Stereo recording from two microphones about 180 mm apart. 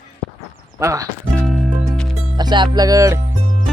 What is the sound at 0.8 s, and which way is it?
Speech, 15° right (ahead or behind).